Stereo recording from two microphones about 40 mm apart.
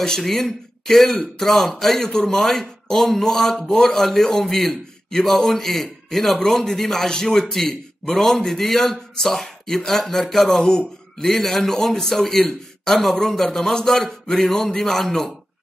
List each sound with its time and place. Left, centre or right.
0.2 s a man's voice: centre
10.6 s a man's voice: centre
11.2 s a man's voice: centre